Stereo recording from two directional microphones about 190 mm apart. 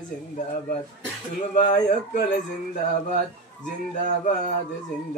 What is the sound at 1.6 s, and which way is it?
Speech, 40° left (ahead or behind).